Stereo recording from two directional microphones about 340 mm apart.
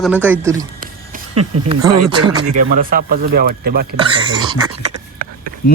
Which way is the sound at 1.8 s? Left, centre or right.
Right.